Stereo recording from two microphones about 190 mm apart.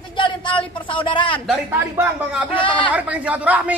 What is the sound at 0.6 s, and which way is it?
Speech, 25° left (ahead or behind).